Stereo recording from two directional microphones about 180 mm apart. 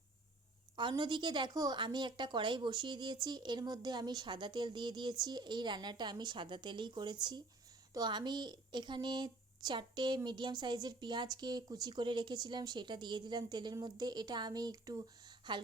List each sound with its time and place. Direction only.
0.8 s a woman's voice: 25° right (ahead or behind)